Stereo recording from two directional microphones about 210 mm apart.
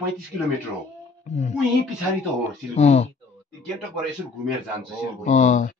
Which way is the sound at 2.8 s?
30° left (ahead or behind).